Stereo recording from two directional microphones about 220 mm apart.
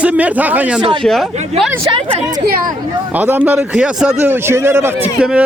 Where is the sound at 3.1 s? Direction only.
5° right (ahead or behind).